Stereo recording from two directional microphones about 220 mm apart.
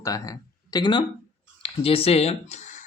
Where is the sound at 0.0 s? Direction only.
15° left (ahead or behind).